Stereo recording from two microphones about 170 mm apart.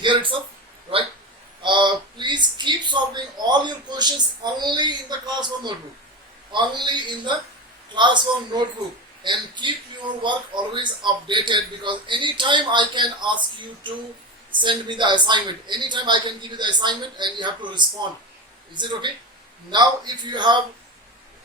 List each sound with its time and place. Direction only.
0.0 s a man's voice: 30° right (ahead or behind)
1.6 s a sound: 30° right (ahead or behind)
4.5 s speech: 25° right (ahead or behind)